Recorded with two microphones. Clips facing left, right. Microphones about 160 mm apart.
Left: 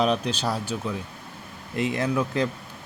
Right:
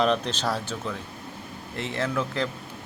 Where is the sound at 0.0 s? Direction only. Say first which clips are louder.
Even; 10° left (ahead or behind).